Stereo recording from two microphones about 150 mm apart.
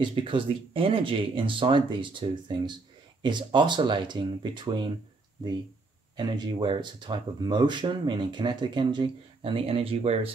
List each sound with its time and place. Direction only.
0.0 s speech: 35° right (ahead or behind)
6.1 s speech: 30° right (ahead or behind)